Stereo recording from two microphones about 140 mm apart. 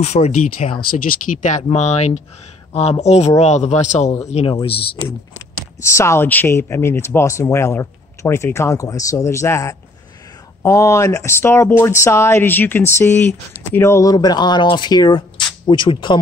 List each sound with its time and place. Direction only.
0.0 s speech: 50° left (ahead or behind); by 1.6 s 65° left (ahead or behind)
1.6 s a man's voice: 50° left (ahead or behind)
5.8 s speech: 20° left (ahead or behind); by 16.2 s 35° left (ahead or behind)